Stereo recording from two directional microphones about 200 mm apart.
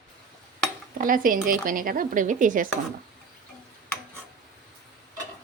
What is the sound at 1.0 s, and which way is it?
Speech, 45° right (ahead or behind).